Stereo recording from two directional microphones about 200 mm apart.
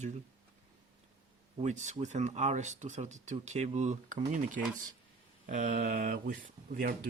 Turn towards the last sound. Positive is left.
turn(degrees=-50)  # may be behind; listen again after turning